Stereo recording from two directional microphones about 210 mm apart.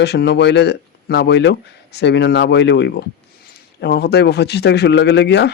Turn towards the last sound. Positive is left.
turn(degrees=55)  # may be behind; listen again after turning